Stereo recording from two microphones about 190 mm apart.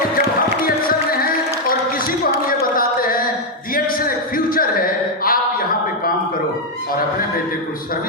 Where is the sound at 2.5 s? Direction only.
50° left (ahead or behind).